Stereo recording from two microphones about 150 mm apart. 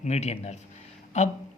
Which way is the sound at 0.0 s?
45° left (ahead or behind).